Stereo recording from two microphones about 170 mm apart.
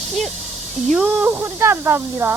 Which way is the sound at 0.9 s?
5° right (ahead or behind).